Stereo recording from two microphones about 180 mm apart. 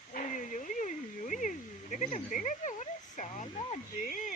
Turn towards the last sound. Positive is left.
turn(degrees=50)  # may be behind; listen again after turning